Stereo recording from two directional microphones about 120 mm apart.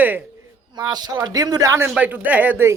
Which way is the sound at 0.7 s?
35° right (ahead or behind).